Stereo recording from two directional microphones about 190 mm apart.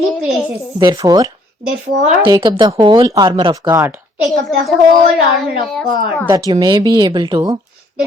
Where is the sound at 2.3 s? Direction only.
25° right (ahead or behind).